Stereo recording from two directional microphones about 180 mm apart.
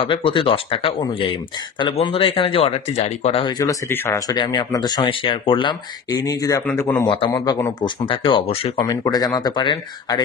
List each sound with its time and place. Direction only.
0.0 s speech: 30° left (ahead or behind)